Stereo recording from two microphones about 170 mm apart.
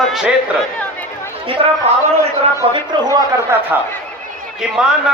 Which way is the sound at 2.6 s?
30° right (ahead or behind).